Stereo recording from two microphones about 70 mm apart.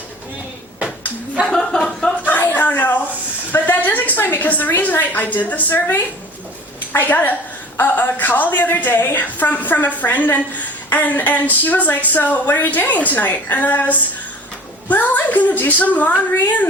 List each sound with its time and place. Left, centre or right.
1.5 s chuckle: centre
2.2 s a sound: left
3.5 s a woman's voice: left